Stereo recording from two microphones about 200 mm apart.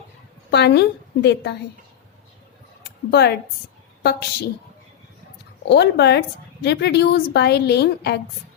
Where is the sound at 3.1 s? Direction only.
55° left (ahead or behind).